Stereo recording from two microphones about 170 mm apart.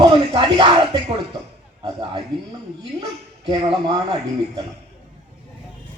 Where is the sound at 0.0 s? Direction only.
30° right (ahead or behind).